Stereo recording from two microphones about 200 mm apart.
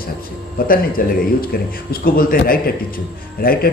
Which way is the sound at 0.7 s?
45° left (ahead or behind).